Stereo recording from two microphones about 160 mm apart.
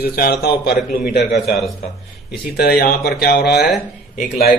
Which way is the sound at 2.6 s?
75° left (ahead or behind).